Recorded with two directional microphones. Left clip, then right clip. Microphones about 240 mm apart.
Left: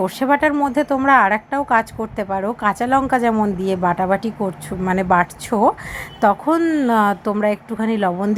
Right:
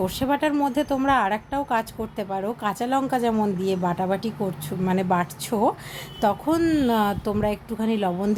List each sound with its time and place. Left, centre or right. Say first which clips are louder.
0.0 s a woman's voice: left 7 dB; centre